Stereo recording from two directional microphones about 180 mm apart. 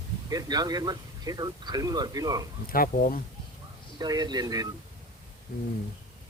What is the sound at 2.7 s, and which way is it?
Speech, 55° left (ahead or behind).